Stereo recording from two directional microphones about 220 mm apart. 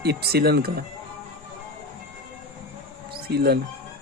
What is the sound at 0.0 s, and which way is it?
Speech, 45° right (ahead or behind).